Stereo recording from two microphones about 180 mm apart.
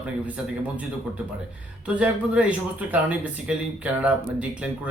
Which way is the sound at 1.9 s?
5° right (ahead or behind).